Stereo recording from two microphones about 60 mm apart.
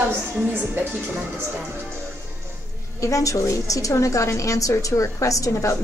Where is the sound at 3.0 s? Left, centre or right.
Left.